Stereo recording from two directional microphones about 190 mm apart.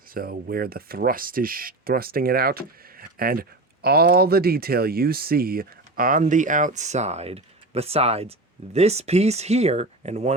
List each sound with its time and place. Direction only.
0.1 s speech: 50° right (ahead or behind); by 10.3 s 35° right (ahead or behind)